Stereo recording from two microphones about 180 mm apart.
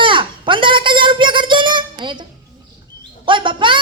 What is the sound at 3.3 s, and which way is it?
Speech, 25° right (ahead or behind).